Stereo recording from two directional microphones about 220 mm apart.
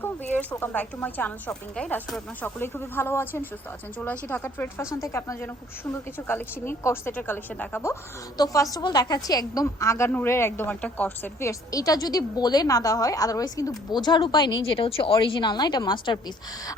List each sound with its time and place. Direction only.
0.0 s a woman's voice: 10° left (ahead or behind)